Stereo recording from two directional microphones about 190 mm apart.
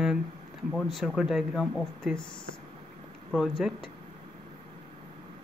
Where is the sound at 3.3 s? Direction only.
Centre (ahead or behind).